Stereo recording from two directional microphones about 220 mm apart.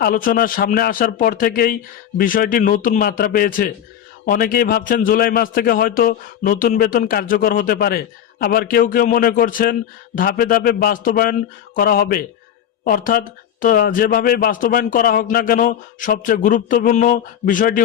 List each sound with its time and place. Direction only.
0.0 s a man's voice: 40° left (ahead or behind)